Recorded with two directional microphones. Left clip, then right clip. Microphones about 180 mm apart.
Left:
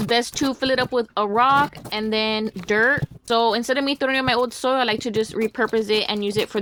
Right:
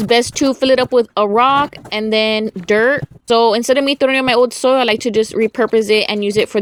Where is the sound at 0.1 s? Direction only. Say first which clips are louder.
Right 8 dB; 30° right (ahead or behind).